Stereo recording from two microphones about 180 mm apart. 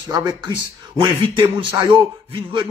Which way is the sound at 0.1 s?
25° right (ahead or behind).